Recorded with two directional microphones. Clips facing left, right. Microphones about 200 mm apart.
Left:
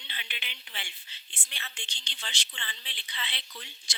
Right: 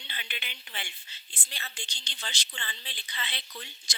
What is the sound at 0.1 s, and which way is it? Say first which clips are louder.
A woman's voice: right 2 dB; 45° right (ahead or behind).